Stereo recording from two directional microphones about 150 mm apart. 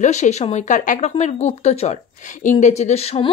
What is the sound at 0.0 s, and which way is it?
Speech, 50° left (ahead or behind).